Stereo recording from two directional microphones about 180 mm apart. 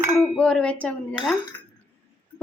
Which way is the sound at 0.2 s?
5° left (ahead or behind).